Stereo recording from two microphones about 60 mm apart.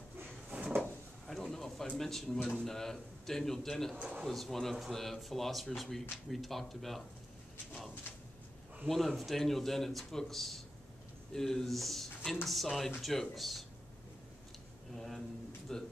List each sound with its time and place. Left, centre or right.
0.5 s drawer open or close: right
1.2 s a sound: centre
2.0 s a man's voice: centre
3.9 s speech: right
4.3 s a man's voice: centre
8.8 s a man's voice: centre
15.0 s a sound: centre
15.7 s a man's voice: centre